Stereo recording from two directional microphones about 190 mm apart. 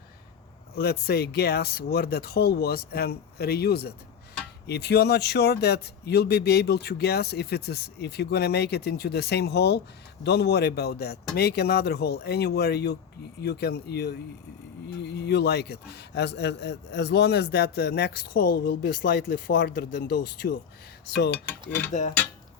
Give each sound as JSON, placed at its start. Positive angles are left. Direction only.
{"t": 0.8, "sound": "a man's voice", "side_deg": 55}